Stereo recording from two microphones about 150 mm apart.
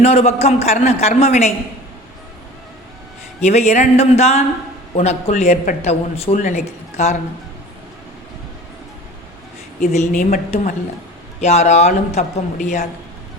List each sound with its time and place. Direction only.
0.0 s a man's voice: 45° left (ahead or behind)
3.4 s a man's voice: 45° left (ahead or behind)
9.8 s speech: 60° left (ahead or behind)
10.5 s a man's voice: 50° left (ahead or behind)